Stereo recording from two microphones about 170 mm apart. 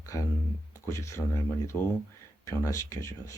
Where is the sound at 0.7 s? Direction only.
20° left (ahead or behind).